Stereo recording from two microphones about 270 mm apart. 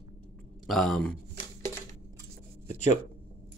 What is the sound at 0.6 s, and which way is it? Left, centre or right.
Speech, centre.